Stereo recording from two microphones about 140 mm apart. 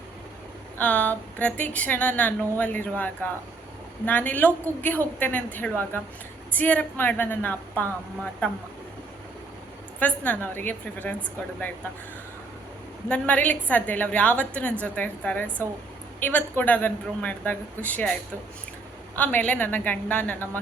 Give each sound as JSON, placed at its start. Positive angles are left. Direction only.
{"t": 0.8, "sound": "a woman's voice", "side_deg": 10}
{"t": 10.0, "sound": "a woman's voice", "side_deg": 10}
{"t": 13.1, "sound": "a woman's voice", "side_deg": 10}